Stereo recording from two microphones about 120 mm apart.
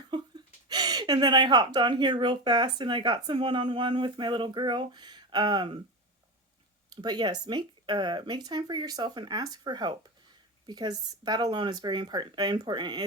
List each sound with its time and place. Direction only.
0.1 s speech: 35° right (ahead or behind)
6.9 s speech: 35° right (ahead or behind)